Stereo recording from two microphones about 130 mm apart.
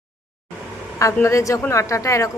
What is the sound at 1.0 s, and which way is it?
Speech, 25° left (ahead or behind).